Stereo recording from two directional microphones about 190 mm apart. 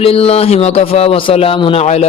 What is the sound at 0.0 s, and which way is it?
Speech, 30° left (ahead or behind).